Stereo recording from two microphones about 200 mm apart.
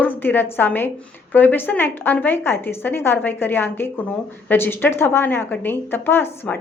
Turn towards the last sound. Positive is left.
turn(degrees=10)  # may be behind; listen again after turning